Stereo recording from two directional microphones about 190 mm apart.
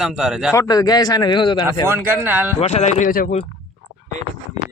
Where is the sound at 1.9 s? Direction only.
10° right (ahead or behind).